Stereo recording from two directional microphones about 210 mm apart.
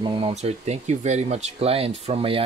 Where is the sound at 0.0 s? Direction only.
25° right (ahead or behind).